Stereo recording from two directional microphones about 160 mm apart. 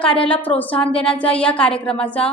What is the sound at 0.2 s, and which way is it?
A woman's voice, 10° left (ahead or behind).